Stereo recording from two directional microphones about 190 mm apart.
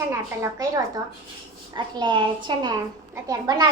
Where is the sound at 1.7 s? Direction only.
25° right (ahead or behind).